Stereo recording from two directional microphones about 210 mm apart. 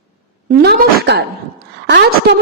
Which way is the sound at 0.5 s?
50° right (ahead or behind).